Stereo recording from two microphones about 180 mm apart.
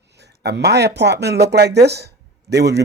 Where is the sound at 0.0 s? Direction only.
70° right (ahead or behind).